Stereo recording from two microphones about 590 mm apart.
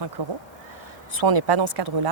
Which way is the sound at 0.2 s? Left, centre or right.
Right.